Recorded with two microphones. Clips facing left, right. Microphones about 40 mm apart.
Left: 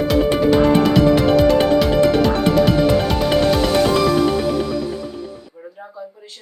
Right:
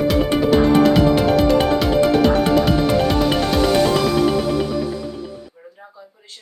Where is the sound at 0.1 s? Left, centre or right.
Centre.